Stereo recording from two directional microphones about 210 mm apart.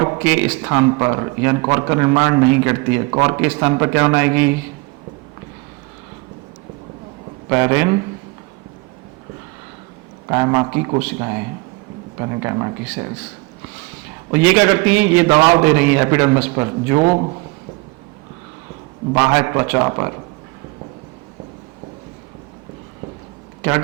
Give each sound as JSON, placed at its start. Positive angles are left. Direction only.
{"t": 0.0, "sound": "speech", "side_deg": -15}
{"t": 0.7, "sound": "a man's voice", "side_deg": -20}
{"t": 7.5, "sound": "a man's voice", "side_deg": -15}
{"t": 10.2, "sound": "speech", "side_deg": -20}
{"t": 14.3, "sound": "a man's voice", "side_deg": -10}
{"t": 19.1, "sound": "a man's voice", "side_deg": -15}